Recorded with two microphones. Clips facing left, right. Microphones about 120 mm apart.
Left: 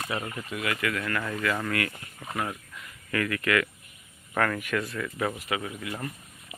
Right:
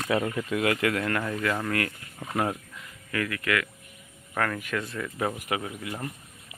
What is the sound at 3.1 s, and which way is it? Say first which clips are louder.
Speech: left 1 dB; 10° right (ahead or behind).